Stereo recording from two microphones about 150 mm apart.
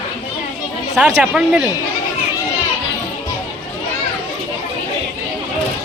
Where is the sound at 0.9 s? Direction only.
5° right (ahead or behind).